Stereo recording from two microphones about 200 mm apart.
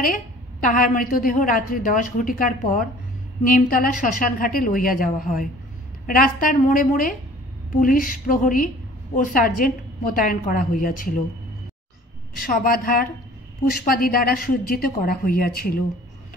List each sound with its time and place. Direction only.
0.0 s a woman's voice: 45° left (ahead or behind)
12.4 s a woman's voice: 45° left (ahead or behind)